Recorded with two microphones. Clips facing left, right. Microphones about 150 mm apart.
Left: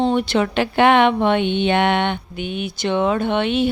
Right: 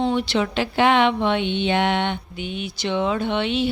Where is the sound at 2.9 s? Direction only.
50° left (ahead or behind).